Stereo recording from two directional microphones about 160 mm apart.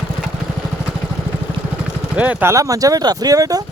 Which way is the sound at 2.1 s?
10° right (ahead or behind).